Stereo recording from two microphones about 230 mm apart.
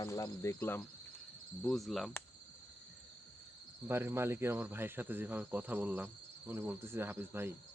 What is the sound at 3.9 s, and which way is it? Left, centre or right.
Cricket, centre.